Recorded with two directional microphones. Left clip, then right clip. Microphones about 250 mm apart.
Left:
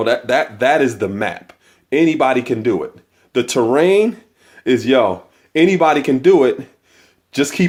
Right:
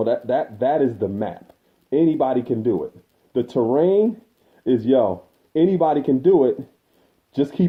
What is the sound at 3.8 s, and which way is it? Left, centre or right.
Speech, left.